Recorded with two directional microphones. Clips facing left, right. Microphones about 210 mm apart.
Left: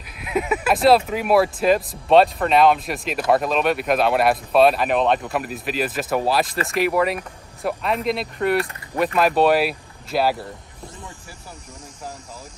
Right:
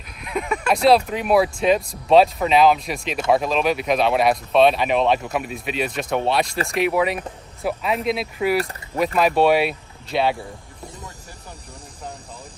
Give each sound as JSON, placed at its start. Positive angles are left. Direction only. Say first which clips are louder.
{"t": 0.2, "sound": "speech", "louder": "left 3 dB", "side_deg": 5}